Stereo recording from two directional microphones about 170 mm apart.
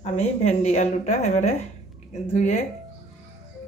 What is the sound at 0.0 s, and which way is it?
Speech, 40° left (ahead or behind).